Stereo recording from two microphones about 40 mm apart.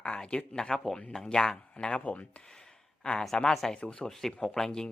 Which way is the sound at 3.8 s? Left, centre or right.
Left.